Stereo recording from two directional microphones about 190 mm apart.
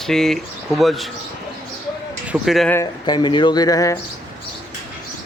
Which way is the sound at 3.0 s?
25° left (ahead or behind).